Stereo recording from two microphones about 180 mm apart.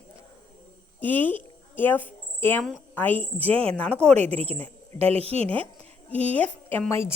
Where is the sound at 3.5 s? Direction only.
30° right (ahead or behind).